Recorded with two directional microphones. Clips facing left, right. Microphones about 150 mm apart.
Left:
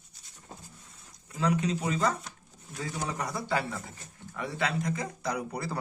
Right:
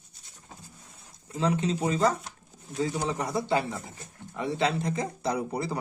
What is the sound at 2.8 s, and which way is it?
Speech, 20° right (ahead or behind).